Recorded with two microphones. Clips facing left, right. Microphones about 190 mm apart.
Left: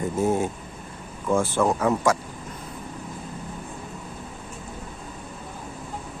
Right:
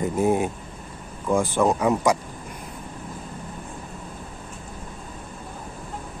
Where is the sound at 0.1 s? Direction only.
15° right (ahead or behind).